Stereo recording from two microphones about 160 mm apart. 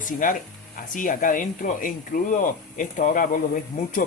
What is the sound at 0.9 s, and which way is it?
Speech, 55° left (ahead or behind).